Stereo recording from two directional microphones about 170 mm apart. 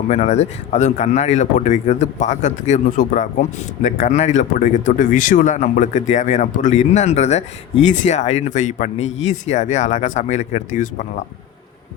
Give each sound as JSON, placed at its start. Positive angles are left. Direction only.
{"t": 0.1, "sound": "speech", "side_deg": 40}